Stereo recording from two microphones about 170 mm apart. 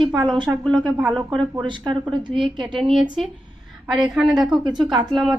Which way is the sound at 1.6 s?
25° right (ahead or behind).